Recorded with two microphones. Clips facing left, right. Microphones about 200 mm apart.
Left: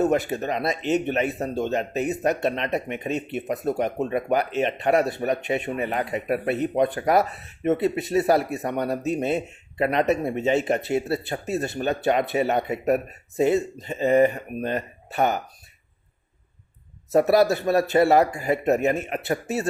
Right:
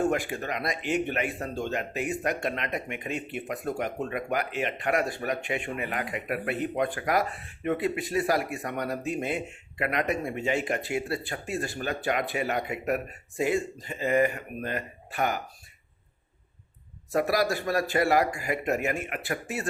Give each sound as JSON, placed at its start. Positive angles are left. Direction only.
{"t": 0.0, "sound": "speech", "side_deg": 20}
{"t": 0.8, "sound": "speech", "side_deg": -10}
{"t": 1.0, "sound": "speech", "side_deg": 20}
{"t": 17.1, "sound": "speech", "side_deg": 25}